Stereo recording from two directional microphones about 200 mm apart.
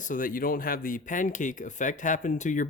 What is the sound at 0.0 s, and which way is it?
Speech, 40° left (ahead or behind).